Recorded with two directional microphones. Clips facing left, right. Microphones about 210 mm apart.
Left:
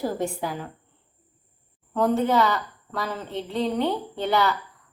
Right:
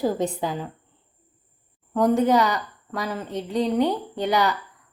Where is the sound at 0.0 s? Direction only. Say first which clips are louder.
Right 3 dB; 20° right (ahead or behind).